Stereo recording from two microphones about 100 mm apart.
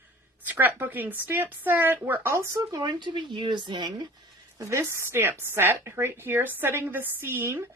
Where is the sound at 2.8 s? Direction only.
50° right (ahead or behind).